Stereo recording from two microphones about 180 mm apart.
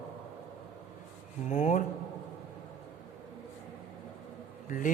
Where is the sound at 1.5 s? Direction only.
40° left (ahead or behind).